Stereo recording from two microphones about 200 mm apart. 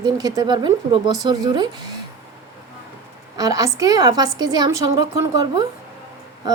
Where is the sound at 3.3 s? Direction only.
20° right (ahead or behind).